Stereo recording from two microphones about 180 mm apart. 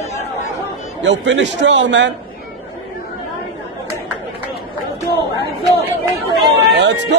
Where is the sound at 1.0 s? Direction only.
90° right.